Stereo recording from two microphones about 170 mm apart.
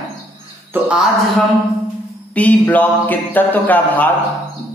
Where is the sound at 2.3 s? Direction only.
10° left (ahead or behind).